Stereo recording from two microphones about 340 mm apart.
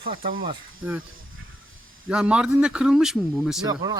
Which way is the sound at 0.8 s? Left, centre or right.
Centre.